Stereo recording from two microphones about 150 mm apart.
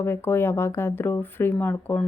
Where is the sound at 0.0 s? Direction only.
15° left (ahead or behind).